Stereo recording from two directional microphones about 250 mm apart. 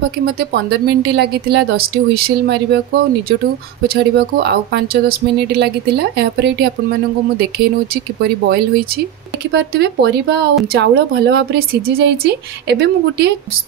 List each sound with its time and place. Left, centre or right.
0.2 s speech: right
3.8 s speech: right